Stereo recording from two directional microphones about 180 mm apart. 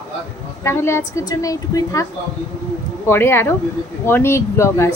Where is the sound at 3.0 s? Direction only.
15° left (ahead or behind).